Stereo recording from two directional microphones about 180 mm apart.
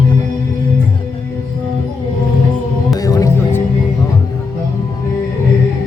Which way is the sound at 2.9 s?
20° left (ahead or behind).